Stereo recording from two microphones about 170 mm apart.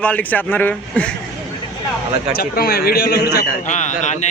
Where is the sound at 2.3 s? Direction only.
65° left (ahead or behind).